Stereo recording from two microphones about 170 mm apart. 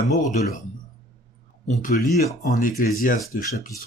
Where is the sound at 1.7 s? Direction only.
50° left (ahead or behind).